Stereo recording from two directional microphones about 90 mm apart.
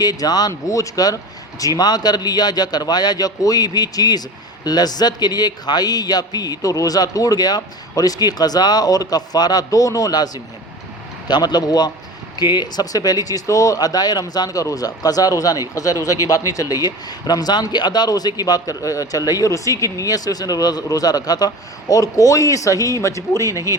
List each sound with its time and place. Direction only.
0.0 s a man's voice: 45° left (ahead or behind)